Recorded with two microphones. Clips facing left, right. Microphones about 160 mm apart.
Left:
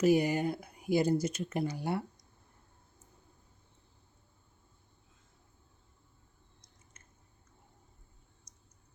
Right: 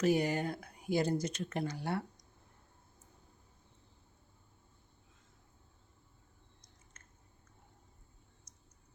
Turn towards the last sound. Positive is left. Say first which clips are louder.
# even
turn(degrees=10)  # may be behind; listen again after turning